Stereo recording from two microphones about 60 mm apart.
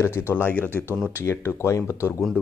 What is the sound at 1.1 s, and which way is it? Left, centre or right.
Speech, left.